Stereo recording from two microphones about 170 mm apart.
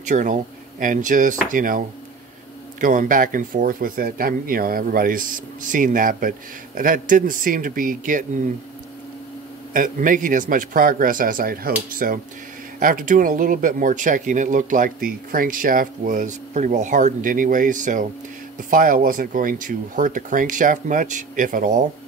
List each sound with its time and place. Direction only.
0.0 s speech: 45° right (ahead or behind)
9.8 s speech: 50° right (ahead or behind)